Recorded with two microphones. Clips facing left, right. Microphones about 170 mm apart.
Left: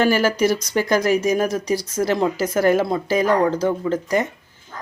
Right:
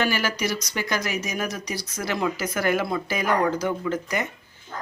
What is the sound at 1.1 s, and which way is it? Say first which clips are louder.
Speech: left 10 dB; 30° left (ahead or behind).